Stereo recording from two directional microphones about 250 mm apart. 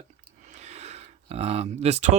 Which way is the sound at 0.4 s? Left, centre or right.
Right.